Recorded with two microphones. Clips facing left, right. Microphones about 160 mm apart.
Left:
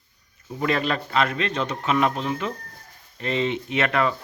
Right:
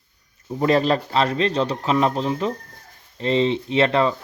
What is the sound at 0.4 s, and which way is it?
Speech, 35° right (ahead or behind).